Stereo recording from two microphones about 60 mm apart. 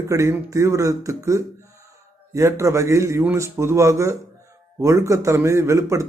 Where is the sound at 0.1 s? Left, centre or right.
Right.